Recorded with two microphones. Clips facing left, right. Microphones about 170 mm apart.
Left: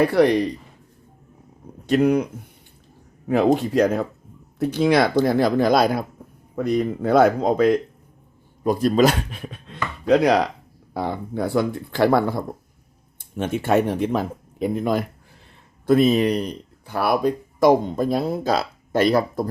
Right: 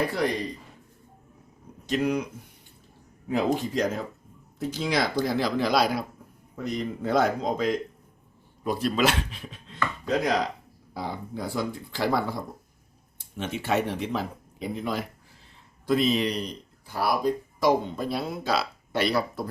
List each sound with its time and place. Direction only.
0.0 s speech: 65° left (ahead or behind)
1.9 s speech: 55° left (ahead or behind)
3.2 s speech: 60° left (ahead or behind)
8.6 s speech: 45° left (ahead or behind)